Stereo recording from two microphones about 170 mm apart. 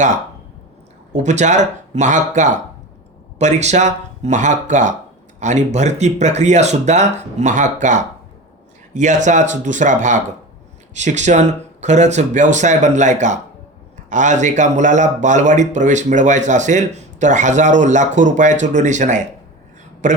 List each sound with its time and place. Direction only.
1.1 s speech: 45° right (ahead or behind)